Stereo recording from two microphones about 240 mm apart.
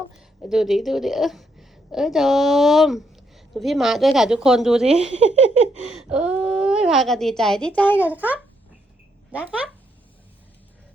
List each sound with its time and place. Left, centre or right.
0.5 s a woman's voice: centre
4.9 s speech: right
5.9 s a woman's voice: centre
8.0 s a child's voice: centre